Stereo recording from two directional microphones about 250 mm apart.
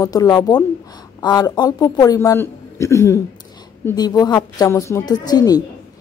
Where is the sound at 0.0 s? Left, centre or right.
Centre.